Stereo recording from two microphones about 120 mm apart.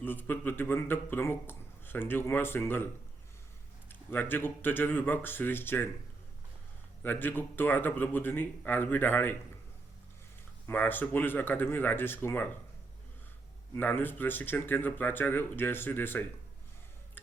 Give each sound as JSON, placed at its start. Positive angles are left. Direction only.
{"t": 0.0, "sound": "a man's voice", "side_deg": 15}
{"t": 4.1, "sound": "a man's voice", "side_deg": 15}
{"t": 7.0, "sound": "a man's voice", "side_deg": 15}
{"t": 10.7, "sound": "a man's voice", "side_deg": 15}
{"t": 13.7, "sound": "a man's voice", "side_deg": 15}